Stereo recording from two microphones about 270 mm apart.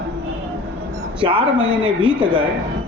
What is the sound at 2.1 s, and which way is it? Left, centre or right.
Speech, centre.